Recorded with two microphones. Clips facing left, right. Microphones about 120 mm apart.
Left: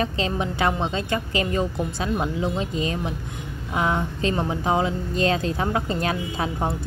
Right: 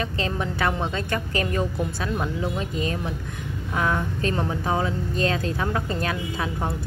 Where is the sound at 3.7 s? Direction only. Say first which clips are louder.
Left 1 dB; 20° left (ahead or behind).